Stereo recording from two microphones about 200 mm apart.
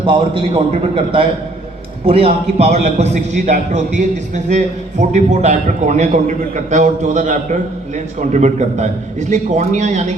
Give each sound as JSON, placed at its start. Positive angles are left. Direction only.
{"t": 0.0, "sound": "a man's voice", "side_deg": -25}